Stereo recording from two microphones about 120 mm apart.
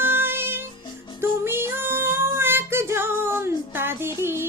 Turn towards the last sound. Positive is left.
turn(degrees=-20)  # may be behind; listen again after turning